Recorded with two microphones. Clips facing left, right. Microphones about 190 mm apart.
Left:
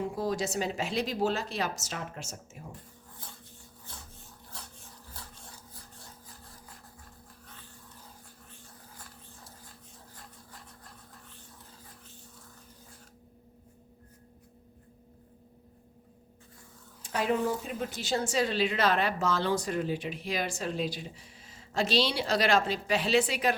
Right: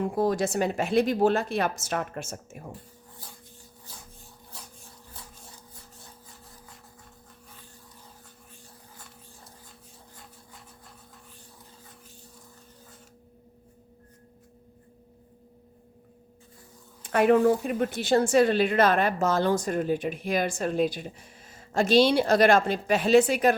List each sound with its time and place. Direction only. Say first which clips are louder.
0.0 s speech: right 6 dB; 55° right (ahead or behind)
17.0 s a woman's voice: right 9 dB; 60° right (ahead or behind)